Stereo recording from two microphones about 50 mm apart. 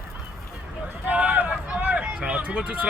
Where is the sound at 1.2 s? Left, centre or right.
Right.